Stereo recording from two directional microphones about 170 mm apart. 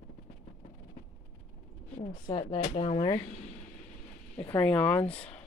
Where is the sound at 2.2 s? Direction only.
25° left (ahead or behind).